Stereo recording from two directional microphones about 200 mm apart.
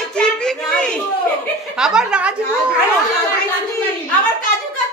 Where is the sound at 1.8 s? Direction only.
5° right (ahead or behind).